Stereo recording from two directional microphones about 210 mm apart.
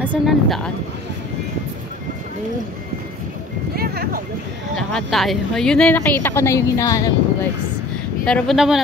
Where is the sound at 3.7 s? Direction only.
45° right (ahead or behind).